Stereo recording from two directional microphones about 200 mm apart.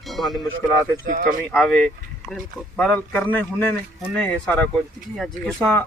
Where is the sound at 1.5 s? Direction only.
5° left (ahead or behind).